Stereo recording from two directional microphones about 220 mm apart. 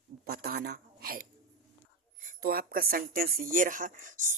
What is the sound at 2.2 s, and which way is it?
Speech, 45° right (ahead or behind).